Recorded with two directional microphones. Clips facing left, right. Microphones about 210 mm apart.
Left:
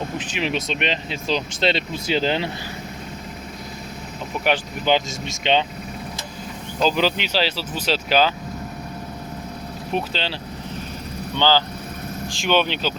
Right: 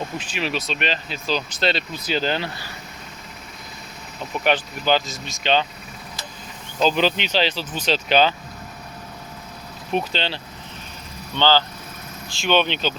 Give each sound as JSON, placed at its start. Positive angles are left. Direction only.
{"t": 0.2, "sound": "speech", "side_deg": 20}
{"t": 4.4, "sound": "speech", "side_deg": 15}
{"t": 6.8, "sound": "speech", "side_deg": 5}
{"t": 9.9, "sound": "speech", "side_deg": 5}
{"t": 11.3, "sound": "speech", "side_deg": 15}